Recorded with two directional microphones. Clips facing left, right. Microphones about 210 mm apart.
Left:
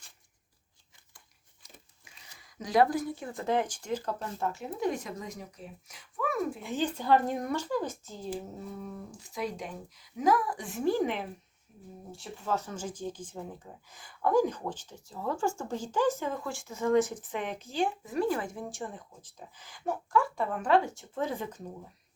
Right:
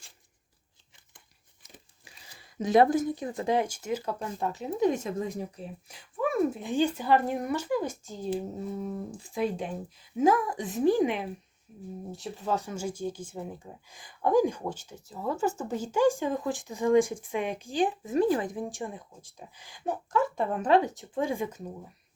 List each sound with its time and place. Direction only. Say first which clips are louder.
2.0 s speech: right 3 dB; 30° right (ahead or behind); by 8.1 s 10° right (ahead or behind)
8.6 s speech: right 6 dB; 25° right (ahead or behind)